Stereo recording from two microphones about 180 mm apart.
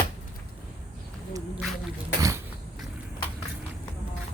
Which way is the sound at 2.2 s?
15° right (ahead or behind).